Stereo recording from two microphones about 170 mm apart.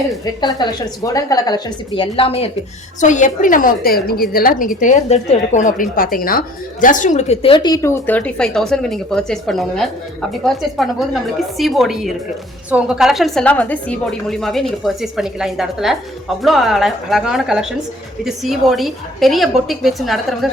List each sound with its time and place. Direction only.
0.4 s a woman's voice: 25° left (ahead or behind)
3.0 s a woman's voice: 45° left (ahead or behind); by 20.5 s centre (ahead or behind)